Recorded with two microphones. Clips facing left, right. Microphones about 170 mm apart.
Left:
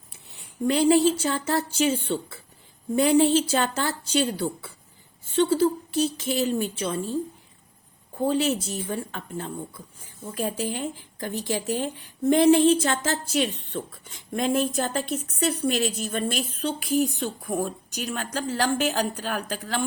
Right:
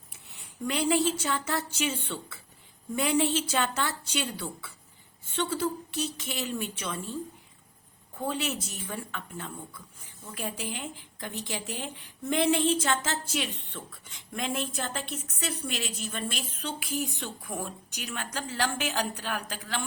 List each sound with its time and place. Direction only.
0.6 s a woman's voice: 30° left (ahead or behind)